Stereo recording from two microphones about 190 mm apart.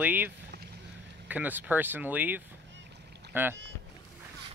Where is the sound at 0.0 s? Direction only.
10° right (ahead or behind).